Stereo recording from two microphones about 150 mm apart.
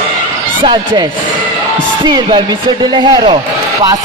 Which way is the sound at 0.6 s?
30° right (ahead or behind).